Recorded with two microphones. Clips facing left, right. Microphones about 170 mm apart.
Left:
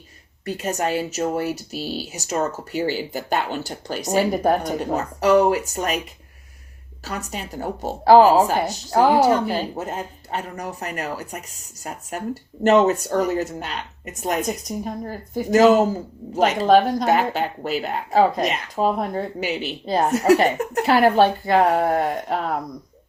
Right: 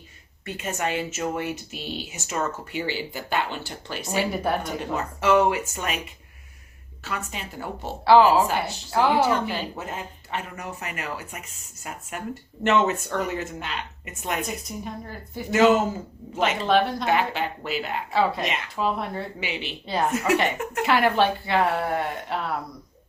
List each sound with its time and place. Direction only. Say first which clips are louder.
0.4 s speech: left 5 dB; 40° left (ahead or behind)
7.0 s speech: left 3 dB; 40° left (ahead or behind)